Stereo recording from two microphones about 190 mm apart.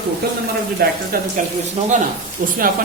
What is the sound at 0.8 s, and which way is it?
Speech, 55° right (ahead or behind).